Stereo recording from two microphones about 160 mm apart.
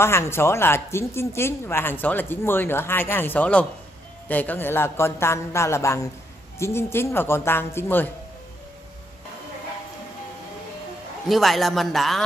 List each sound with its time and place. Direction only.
0.0 s speech: 15° left (ahead or behind)
11.2 s speech: centre (ahead or behind)